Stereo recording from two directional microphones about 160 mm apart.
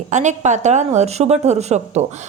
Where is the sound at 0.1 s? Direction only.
50° right (ahead or behind).